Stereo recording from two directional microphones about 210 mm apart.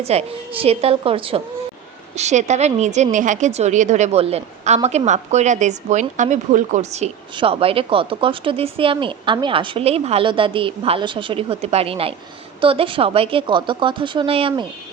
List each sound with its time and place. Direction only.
0.0 s a woman's voice: 30° right (ahead or behind)